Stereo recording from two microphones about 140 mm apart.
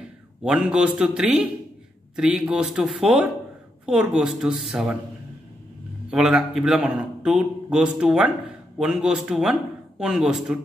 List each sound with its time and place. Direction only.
0.4 s a man's voice: 5° right (ahead or behind)
6.0 s a man's voice: 5° right (ahead or behind)